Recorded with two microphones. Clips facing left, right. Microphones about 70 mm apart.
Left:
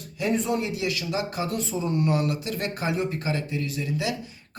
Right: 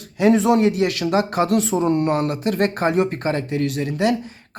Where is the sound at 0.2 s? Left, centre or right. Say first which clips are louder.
Right 10 dB; right.